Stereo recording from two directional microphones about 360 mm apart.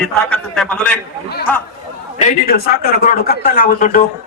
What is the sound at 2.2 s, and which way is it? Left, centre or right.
Speech, left.